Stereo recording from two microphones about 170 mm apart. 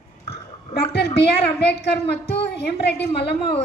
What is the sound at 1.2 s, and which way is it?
A woman's voice, 75° left (ahead or behind).